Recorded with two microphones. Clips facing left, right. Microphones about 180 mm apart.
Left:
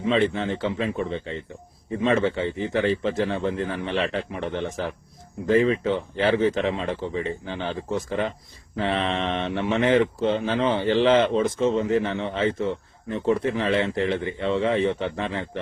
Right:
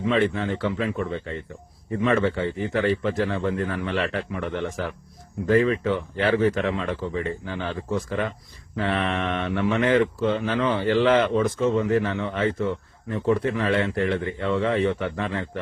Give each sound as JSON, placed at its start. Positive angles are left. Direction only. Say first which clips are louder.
{"t": 0.0, "sound": "speech", "louder": "even", "side_deg": 25}